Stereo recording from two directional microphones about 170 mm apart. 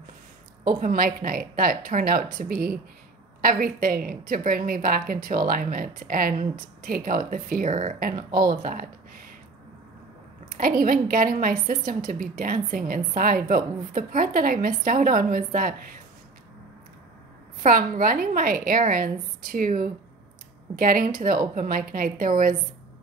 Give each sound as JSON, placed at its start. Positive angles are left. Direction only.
{"t": 0.7, "sound": "a woman's voice", "side_deg": -55}
{"t": 10.6, "sound": "a woman's voice", "side_deg": -55}
{"t": 17.6, "sound": "a woman's voice", "side_deg": -55}